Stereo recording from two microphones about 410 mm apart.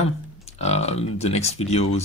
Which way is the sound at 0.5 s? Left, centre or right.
Centre.